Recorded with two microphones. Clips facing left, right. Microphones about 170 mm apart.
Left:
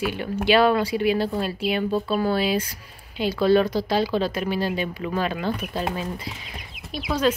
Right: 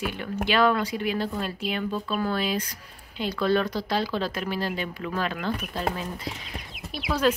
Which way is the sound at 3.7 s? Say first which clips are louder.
Left 5 dB; 5° left (ahead or behind).